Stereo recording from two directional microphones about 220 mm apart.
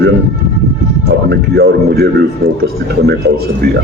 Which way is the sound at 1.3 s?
50° right (ahead or behind).